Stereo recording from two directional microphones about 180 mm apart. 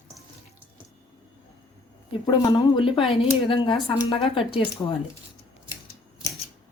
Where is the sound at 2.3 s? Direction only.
30° left (ahead or behind).